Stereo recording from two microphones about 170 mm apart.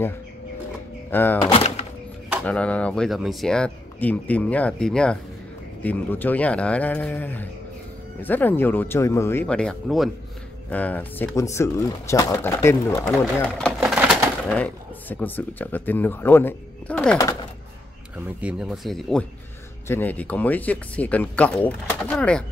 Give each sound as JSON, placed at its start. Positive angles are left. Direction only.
{"t": 1.1, "sound": "speech", "side_deg": 10}
{"t": 1.5, "sound": "thunk", "side_deg": 35}
{"t": 2.4, "sound": "speech", "side_deg": 5}
{"t": 13.6, "sound": "a sound", "side_deg": 0}
{"t": 14.5, "sound": "speech", "side_deg": 10}
{"t": 18.4, "sound": "speech", "side_deg": -5}